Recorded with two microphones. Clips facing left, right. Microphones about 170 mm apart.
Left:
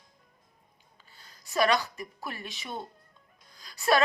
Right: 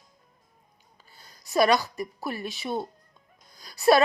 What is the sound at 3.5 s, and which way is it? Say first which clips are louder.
Whimper: right 6 dB; 35° right (ahead or behind).